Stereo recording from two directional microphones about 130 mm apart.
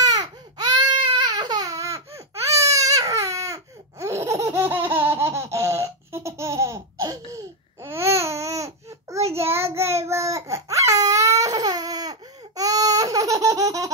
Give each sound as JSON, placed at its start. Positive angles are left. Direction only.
{"t": 0.0, "sound": "baby cry", "side_deg": -30}